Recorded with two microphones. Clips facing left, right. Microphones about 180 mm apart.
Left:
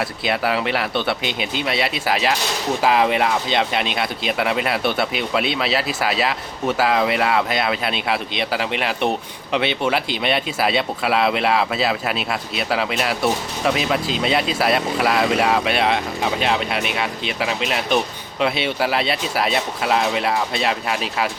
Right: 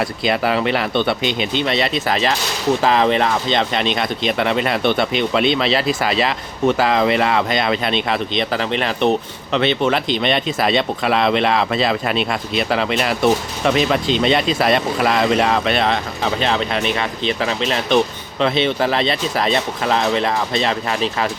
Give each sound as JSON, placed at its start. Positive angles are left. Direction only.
{"t": 0.0, "sound": "speech", "side_deg": 5}